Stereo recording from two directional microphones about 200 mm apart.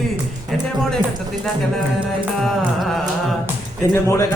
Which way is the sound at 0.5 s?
Centre (ahead or behind).